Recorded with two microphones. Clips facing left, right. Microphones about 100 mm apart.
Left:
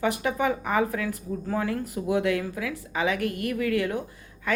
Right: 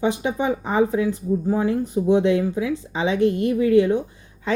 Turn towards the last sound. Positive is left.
turn(degrees=-20)  # may be behind; listen again after turning